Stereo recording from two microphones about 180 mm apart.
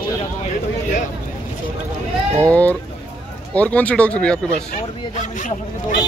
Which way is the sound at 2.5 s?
10° left (ahead or behind).